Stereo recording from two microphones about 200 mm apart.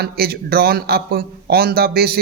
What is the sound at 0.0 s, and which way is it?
A man's voice, 50° right (ahead or behind).